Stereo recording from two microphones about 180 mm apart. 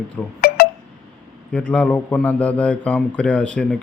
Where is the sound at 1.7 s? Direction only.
5° left (ahead or behind).